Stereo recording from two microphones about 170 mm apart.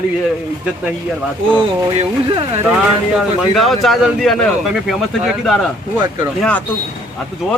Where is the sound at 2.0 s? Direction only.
35° right (ahead or behind).